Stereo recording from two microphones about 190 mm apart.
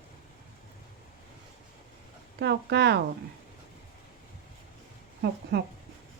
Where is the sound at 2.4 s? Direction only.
60° right (ahead or behind).